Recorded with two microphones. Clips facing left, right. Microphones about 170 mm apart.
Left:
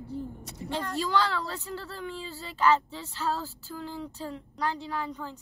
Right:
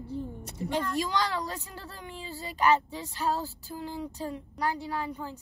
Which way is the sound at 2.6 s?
15° right (ahead or behind).